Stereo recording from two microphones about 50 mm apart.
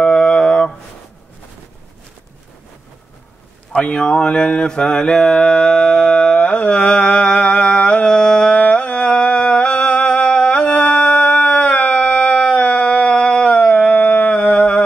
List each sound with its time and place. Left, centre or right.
0.0 s a sound: centre
3.7 s mantra: left
8.5 s music: left